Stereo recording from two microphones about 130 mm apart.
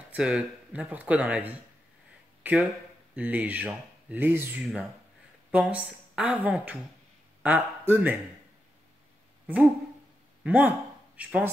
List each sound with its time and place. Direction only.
0.1 s speech: 10° right (ahead or behind)
10.4 s speech: 10° right (ahead or behind)